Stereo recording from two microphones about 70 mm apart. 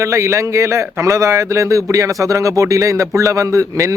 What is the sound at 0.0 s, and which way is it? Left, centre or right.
Speech, right.